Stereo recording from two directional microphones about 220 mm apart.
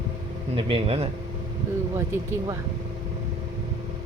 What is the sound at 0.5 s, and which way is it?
Speech, 25° right (ahead or behind).